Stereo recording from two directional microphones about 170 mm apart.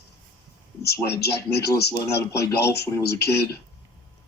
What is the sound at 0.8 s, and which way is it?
A man's voice, 70° left (ahead or behind).